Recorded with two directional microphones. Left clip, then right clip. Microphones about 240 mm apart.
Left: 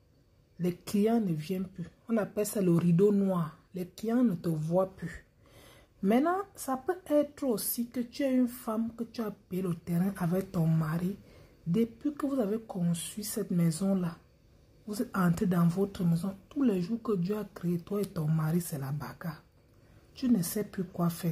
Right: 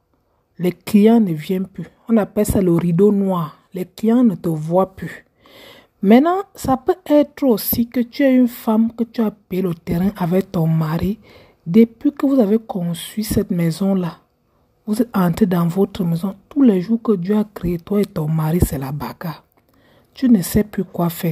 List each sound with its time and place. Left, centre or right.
0.6 s speech: right